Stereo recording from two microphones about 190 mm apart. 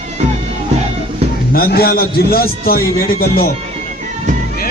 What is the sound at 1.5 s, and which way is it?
A man's voice, 55° left (ahead or behind).